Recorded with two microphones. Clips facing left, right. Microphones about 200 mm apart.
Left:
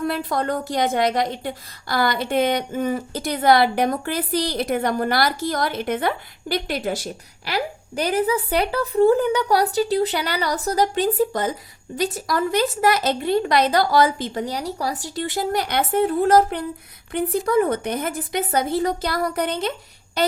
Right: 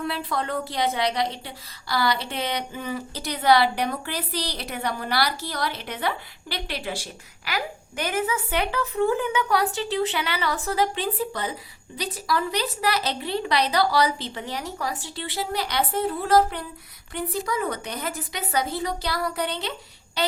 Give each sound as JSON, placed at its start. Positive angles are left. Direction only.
{"t": 0.0, "sound": "a woman's voice", "side_deg": 45}